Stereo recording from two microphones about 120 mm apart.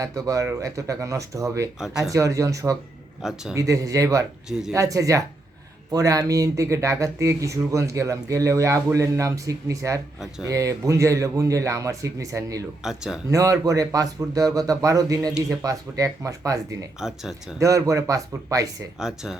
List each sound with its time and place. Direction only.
0.0 s speech: 30° right (ahead or behind)
4.4 s speech: 5° right (ahead or behind)
4.7 s speech: 25° right (ahead or behind)
12.8 s speech: 5° right (ahead or behind)
13.3 s speech: 30° right (ahead or behind)
17.0 s speech: 5° right (ahead or behind)
17.6 s speech: 25° right (ahead or behind)
18.9 s speech: 5° right (ahead or behind)